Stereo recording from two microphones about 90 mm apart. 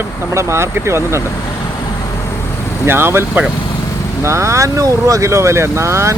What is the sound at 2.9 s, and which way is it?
Speech, 25° right (ahead or behind).